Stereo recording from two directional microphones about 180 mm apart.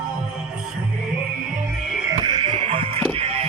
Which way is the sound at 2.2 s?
25° right (ahead or behind).